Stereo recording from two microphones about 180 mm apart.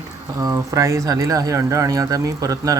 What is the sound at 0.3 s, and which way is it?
Speech, 20° right (ahead or behind).